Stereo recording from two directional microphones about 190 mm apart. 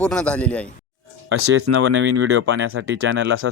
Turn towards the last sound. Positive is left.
turn(degrees=-90)